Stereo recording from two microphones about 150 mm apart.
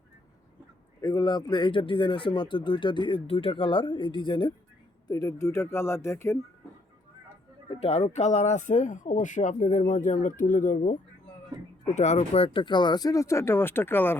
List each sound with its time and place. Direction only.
1.0 s speech: 25° left (ahead or behind)
7.7 s speech: 45° left (ahead or behind); by 10.9 s 60° left (ahead or behind)
11.9 s speech: 50° left (ahead or behind); by 14.2 s 15° left (ahead or behind)